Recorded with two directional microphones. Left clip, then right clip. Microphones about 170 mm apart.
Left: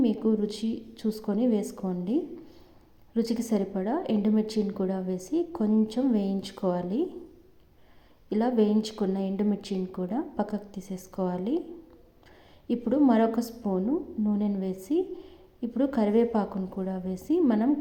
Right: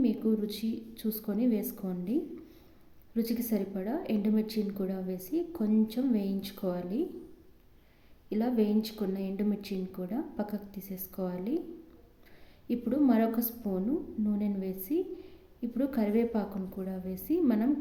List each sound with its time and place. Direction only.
0.0 s a woman's voice: 10° left (ahead or behind)
3.2 s a woman's voice: 10° left (ahead or behind)
8.3 s a woman's voice: 10° left (ahead or behind)
12.6 s a woman's voice: 10° left (ahead or behind)